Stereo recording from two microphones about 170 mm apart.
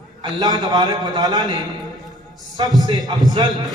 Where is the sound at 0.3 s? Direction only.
25° right (ahead or behind).